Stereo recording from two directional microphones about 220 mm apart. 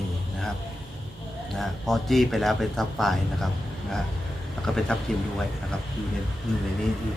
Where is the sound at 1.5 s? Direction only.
Centre (ahead or behind).